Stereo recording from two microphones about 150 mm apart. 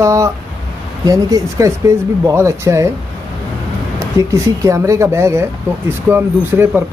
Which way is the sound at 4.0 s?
20° right (ahead or behind).